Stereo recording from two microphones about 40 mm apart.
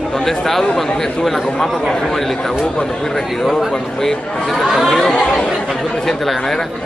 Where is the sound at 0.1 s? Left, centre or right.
Centre.